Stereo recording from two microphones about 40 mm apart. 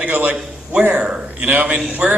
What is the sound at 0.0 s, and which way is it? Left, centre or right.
A man's voice, right.